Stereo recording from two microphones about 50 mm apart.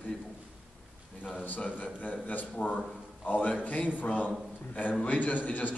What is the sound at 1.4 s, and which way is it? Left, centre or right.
A man's voice, left.